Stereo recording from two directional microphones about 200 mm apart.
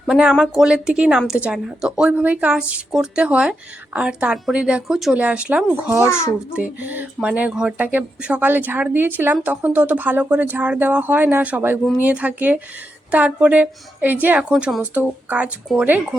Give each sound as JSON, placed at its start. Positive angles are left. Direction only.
{"t": 0.0, "sound": "a woman's voice", "side_deg": -5}